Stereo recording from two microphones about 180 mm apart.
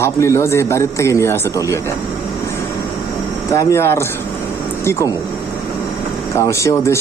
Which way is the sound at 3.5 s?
15° left (ahead or behind).